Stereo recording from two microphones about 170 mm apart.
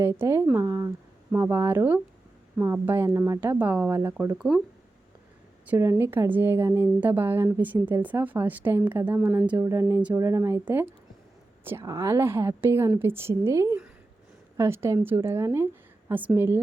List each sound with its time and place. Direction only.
0.0 s a woman's voice: 15° right (ahead or behind)
5.6 s a woman's voice: 15° right (ahead or behind)